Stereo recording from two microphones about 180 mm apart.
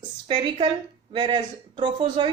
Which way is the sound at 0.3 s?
30° right (ahead or behind).